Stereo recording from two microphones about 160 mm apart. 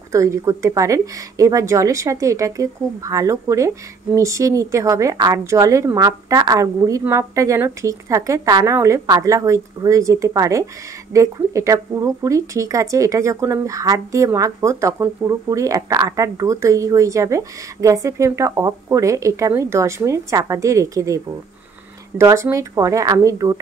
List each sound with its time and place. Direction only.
0.1 s speech: 20° right (ahead or behind)
22.2 s speech: 20° right (ahead or behind)